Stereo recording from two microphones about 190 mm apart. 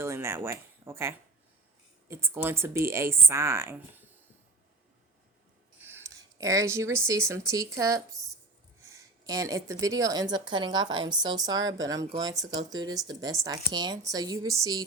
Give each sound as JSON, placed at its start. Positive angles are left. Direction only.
{"t": 0.0, "sound": "speech", "side_deg": -15}
{"t": 5.8, "sound": "a woman's voice", "side_deg": -15}